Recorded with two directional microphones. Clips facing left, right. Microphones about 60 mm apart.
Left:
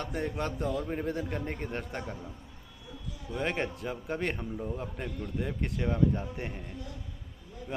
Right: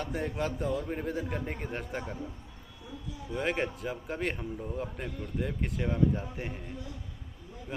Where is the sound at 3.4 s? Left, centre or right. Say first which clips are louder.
Right 1 dB; centre.